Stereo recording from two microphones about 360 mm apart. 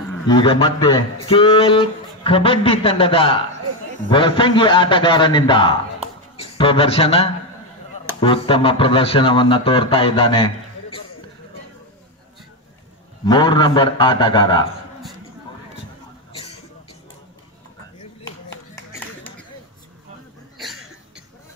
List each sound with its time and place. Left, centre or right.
0.3 s a man's voice: centre
13.2 s a man's voice: centre
18.2 s a sound: centre